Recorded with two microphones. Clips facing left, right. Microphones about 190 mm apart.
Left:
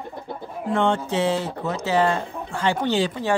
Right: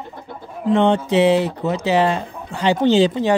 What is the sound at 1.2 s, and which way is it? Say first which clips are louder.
Speech: right 7 dB; 15° right (ahead or behind).